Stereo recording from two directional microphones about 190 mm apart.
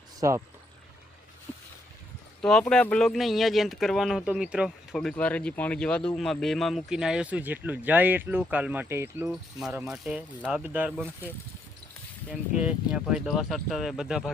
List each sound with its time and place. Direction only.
0.2 s speech: 20° right (ahead or behind)
2.4 s speech: 5° left (ahead or behind)
12.3 s speech: 5° right (ahead or behind)